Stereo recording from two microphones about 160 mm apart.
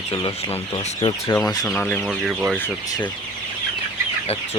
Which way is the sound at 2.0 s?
Centre (ahead or behind).